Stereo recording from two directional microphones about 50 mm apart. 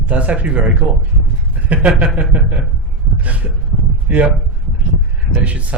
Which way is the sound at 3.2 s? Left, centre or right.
Right.